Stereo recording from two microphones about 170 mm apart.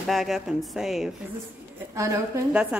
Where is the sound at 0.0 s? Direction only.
Centre (ahead or behind).